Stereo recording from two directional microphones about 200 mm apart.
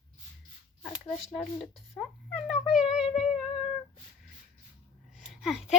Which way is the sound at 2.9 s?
35° left (ahead or behind).